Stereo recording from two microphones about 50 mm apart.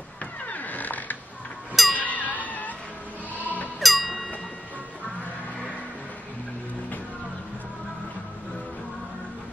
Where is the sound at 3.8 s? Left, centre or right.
Centre.